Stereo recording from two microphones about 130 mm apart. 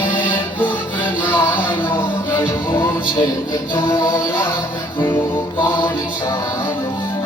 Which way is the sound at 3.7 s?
20° left (ahead or behind).